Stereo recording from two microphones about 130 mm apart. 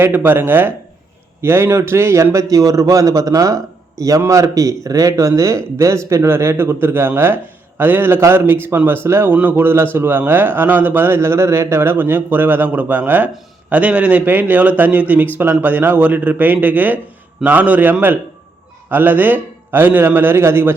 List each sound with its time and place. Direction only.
0.0 s a man's voice: 15° right (ahead or behind)